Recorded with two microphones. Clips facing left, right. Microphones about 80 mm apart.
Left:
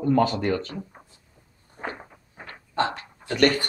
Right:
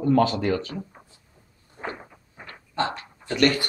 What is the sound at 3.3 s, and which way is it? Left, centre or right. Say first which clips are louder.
Speech: left 1 dB; left.